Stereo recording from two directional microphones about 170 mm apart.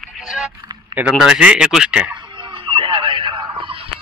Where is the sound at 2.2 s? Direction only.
30° right (ahead or behind).